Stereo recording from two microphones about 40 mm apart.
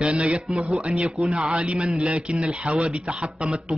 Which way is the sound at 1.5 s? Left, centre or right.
Right.